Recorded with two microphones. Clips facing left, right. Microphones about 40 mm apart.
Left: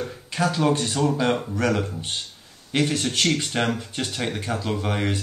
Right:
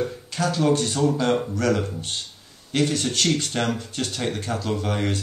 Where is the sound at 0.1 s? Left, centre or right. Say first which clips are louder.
Left 1 dB; centre.